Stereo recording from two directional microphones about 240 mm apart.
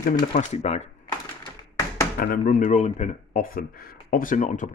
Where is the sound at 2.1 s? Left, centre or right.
Left.